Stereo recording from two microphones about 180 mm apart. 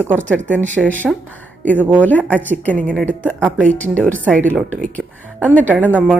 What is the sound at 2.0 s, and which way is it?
Speech, 10° left (ahead or behind).